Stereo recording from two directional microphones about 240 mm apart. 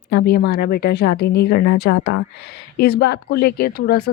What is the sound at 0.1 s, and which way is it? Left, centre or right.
Speech, left.